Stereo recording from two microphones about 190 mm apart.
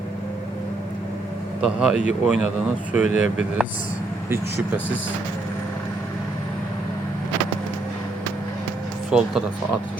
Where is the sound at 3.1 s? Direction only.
40° left (ahead or behind).